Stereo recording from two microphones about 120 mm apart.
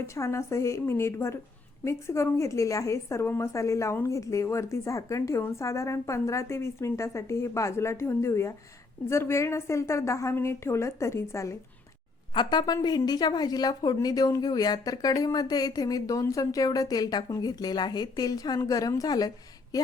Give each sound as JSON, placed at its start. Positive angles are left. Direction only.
{"t": 0.0, "sound": "a woman's voice", "side_deg": 25}
{"t": 12.3, "sound": "a woman's voice", "side_deg": 40}